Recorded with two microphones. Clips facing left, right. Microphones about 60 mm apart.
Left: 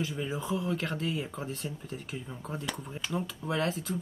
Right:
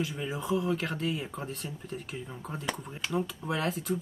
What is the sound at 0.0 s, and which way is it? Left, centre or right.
Speech, centre.